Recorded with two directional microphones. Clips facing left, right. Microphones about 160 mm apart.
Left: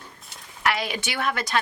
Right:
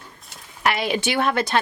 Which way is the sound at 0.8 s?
30° right (ahead or behind).